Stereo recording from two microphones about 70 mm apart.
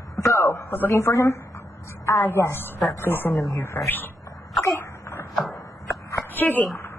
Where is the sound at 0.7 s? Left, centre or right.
Left.